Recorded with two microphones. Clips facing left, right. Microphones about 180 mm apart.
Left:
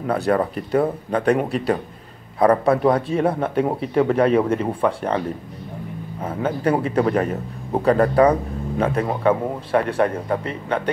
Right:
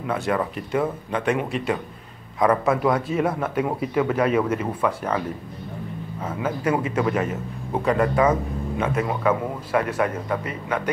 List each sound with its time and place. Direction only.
0.0 s a man's voice: 35° left (ahead or behind)
6.2 s a man's voice: 30° left (ahead or behind)